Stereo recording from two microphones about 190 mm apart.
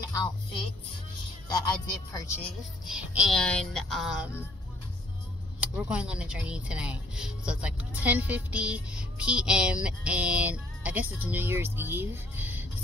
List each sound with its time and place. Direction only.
1.5 s speech: 20° left (ahead or behind)
2.9 s speech: 5° right (ahead or behind)
5.6 s speech: 5° right (ahead or behind)